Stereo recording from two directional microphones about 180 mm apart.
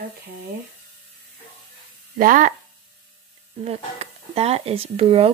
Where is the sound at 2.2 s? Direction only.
50° right (ahead or behind).